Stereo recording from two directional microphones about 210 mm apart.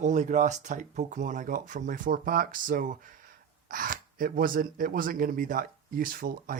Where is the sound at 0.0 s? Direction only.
35° right (ahead or behind).